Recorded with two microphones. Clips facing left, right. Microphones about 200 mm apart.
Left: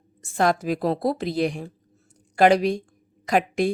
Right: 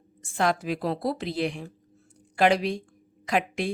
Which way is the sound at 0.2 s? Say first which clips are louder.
Left 4 dB; 40° left (ahead or behind).